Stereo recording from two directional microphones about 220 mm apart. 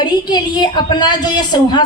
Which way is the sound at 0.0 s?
20° left (ahead or behind).